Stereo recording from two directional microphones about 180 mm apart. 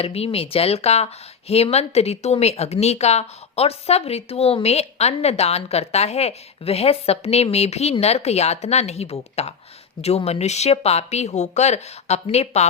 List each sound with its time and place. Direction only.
0.0 s speech: 35° left (ahead or behind)